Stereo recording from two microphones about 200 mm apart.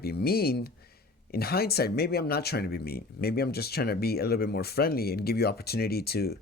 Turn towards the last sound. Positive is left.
turn(degrees=50)  # may be behind; listen again after turning